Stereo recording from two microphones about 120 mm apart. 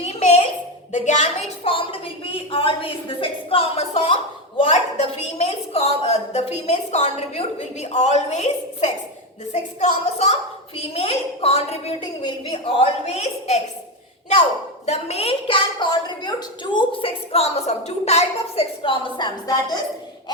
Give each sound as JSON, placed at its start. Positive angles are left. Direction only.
{"t": 0.0, "sound": "a sound", "side_deg": 65}
{"t": 1.0, "sound": "a woman's voice", "side_deg": 80}
{"t": 1.6, "sound": "a woman's voice", "side_deg": 50}
{"t": 4.1, "sound": "a woman's voice", "side_deg": 45}
{"t": 5.2, "sound": "a woman's voice", "side_deg": 65}
{"t": 10.8, "sound": "a woman's voice", "side_deg": 55}
{"t": 14.8, "sound": "a woman's voice", "side_deg": 60}
{"t": 16.7, "sound": "a woman's voice", "side_deg": 50}